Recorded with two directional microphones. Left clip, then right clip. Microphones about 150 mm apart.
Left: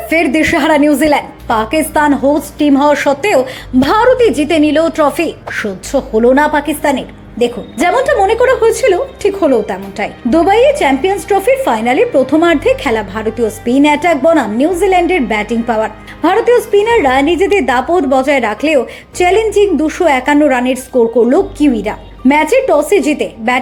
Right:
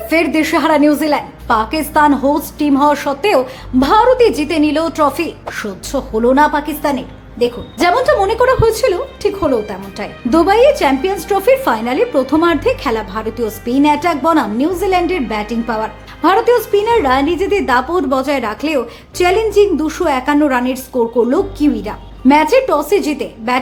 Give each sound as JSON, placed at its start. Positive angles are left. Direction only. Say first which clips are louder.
{"t": 0.3, "sound": "a woman's voice", "louder": "left 3 dB", "side_deg": 15}